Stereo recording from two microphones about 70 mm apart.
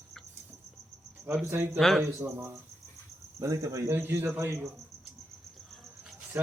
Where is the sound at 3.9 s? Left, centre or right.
Right.